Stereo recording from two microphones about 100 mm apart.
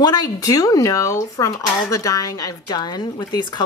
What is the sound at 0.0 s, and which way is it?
A woman's voice, 40° left (ahead or behind).